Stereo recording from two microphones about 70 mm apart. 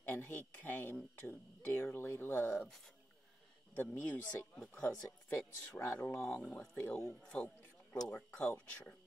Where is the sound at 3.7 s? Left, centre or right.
Left.